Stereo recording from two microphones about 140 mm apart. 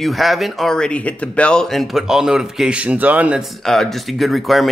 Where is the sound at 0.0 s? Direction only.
Centre (ahead or behind).